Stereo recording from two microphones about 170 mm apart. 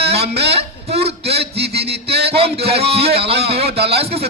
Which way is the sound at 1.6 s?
70° right (ahead or behind).